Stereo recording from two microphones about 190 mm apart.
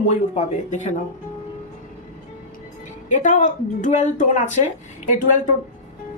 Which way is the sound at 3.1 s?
40° left (ahead or behind).